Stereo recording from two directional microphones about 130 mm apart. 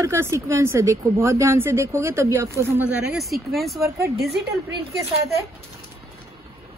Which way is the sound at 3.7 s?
25° right (ahead or behind).